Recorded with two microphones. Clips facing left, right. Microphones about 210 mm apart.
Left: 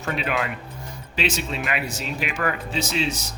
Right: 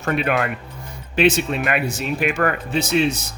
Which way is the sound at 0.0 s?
55° right (ahead or behind).